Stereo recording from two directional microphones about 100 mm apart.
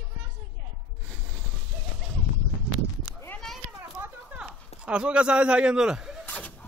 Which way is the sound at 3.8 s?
20° right (ahead or behind).